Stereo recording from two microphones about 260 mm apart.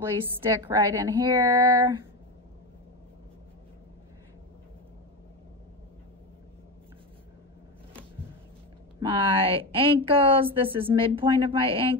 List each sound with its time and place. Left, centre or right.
0.0 s a woman's voice: centre
9.0 s a woman's voice: centre